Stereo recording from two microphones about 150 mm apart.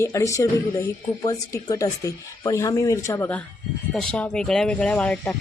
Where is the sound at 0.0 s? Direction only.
20° left (ahead or behind).